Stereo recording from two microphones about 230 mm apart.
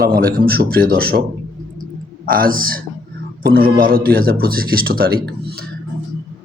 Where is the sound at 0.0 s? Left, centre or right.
Right.